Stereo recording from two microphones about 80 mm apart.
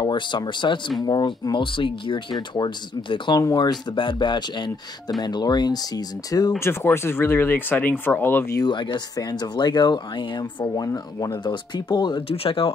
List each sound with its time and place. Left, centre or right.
0.0 s speech: left
1.0 s speech: left
2.5 s speech: left
3.3 s speech: left
6.6 s speech: left
8.6 s speech: left
9.1 s speech: left
10.9 s speech: left
11.4 s speech: left